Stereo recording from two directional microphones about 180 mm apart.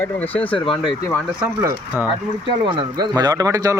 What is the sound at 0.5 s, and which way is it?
Speech, 30° left (ahead or behind).